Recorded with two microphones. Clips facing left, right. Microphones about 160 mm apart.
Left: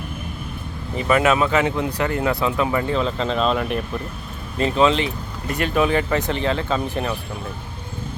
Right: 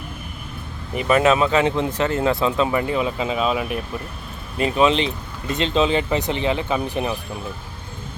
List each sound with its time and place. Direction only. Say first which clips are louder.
0.9 s speech: right 1 dB; 20° right (ahead or behind); by 3.8 s 5° right (ahead or behind)
4.5 s speech: even; 15° right (ahead or behind)